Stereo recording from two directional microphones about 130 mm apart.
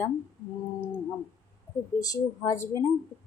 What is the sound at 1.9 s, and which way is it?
Speech, 30° left (ahead or behind).